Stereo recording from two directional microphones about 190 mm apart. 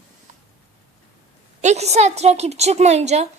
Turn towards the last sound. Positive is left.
turn(degrees=-35)  # may be behind; listen again after turning